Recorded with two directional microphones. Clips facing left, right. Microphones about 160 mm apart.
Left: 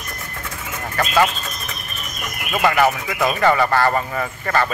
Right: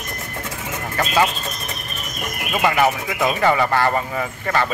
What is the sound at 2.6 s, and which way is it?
Speech, 15° right (ahead or behind).